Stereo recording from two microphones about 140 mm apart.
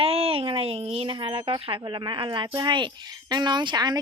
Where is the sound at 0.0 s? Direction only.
45° right (ahead or behind).